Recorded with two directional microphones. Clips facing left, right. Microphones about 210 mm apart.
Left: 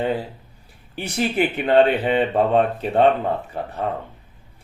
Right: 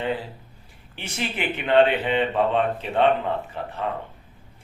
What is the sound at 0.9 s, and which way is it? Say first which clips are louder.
Speech: left 8 dB; 40° left (ahead or behind).